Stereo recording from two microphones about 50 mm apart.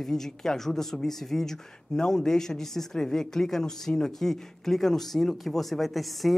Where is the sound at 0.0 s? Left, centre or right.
Centre.